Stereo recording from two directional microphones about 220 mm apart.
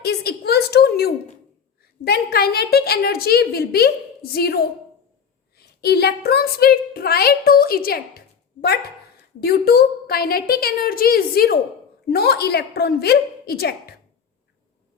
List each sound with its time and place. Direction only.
0.0 s a sound: 45° left (ahead or behind)
1.8 s a woman's voice: 45° left (ahead or behind)
9.4 s a woman's voice: 45° left (ahead or behind)